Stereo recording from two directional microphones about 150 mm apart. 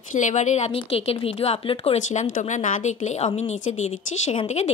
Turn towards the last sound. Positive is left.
turn(degrees=45)  # may be behind; listen again after turning